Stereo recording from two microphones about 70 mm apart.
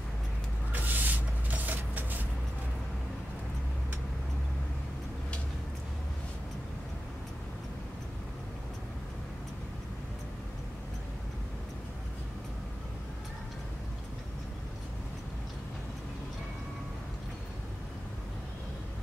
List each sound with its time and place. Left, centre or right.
0.7 s vehicle: right